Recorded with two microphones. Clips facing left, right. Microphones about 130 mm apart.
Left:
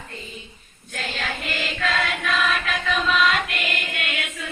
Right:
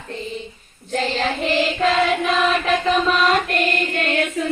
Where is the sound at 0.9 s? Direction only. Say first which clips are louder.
Right 9 dB; 40° right (ahead or behind).